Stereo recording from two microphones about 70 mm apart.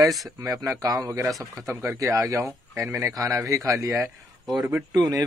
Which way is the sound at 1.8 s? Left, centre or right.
Right.